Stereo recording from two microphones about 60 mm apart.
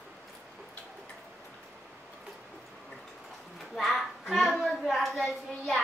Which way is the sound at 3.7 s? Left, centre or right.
Centre.